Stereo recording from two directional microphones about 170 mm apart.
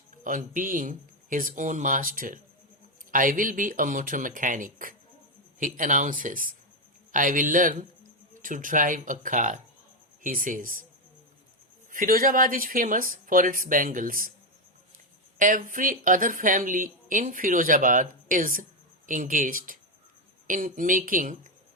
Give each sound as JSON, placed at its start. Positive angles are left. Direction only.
{"t": 0.3, "sound": "a woman's voice", "side_deg": -50}
{"t": 11.9, "sound": "a woman's voice", "side_deg": -55}
{"t": 15.4, "sound": "a woman's voice", "side_deg": -50}